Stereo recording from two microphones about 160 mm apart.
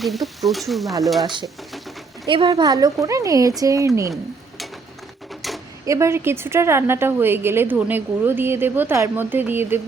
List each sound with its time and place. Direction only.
0.0 s speech: centre (ahead or behind)
2.2 s speech: 30° right (ahead or behind)
4.1 s stir: centre (ahead or behind)
5.8 s a woman's voice: 20° right (ahead or behind)